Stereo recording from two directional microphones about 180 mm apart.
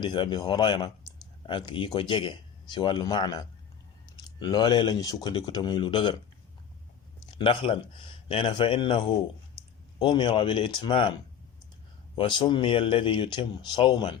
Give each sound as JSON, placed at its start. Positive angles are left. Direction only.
{"t": 0.0, "sound": "speech", "side_deg": 25}
{"t": 7.3, "sound": "speech", "side_deg": 30}
{"t": 12.1, "sound": "speech", "side_deg": 25}